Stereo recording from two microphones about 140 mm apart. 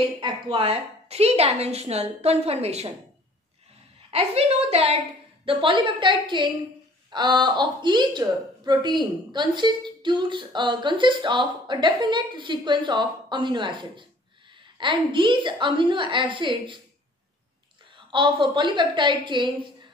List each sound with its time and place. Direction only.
0.2 s a woman's voice: 40° right (ahead or behind)
4.1 s a woman's voice: 45° right (ahead or behind)
17.9 s a woman's voice: 35° right (ahead or behind)